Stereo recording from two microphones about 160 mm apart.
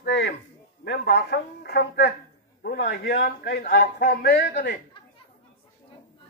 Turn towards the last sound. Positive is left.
turn(degrees=75)  # may be behind; listen again after turning